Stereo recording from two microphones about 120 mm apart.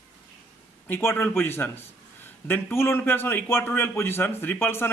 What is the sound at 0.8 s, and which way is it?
A man's voice, 20° left (ahead or behind).